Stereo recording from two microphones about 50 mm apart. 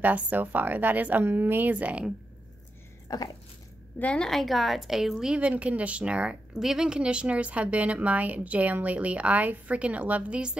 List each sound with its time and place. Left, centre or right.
0.0 s a woman's voice: right
4.2 s a woman's voice: centre
5.3 s a woman's voice: right
6.5 s a woman's voice: centre; by 10.4 s right